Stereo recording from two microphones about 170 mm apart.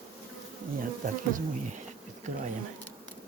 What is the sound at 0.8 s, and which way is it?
Bee, 50° right (ahead or behind).